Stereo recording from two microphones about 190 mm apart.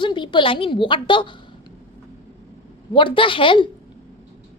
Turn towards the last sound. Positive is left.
turn(degrees=25)  # may be behind; listen again after turning